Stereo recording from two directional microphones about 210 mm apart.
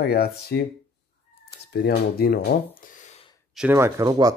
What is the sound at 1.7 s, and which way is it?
Speech, 50° left (ahead or behind).